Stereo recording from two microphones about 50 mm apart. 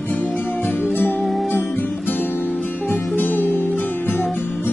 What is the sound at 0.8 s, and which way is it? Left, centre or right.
Music, left.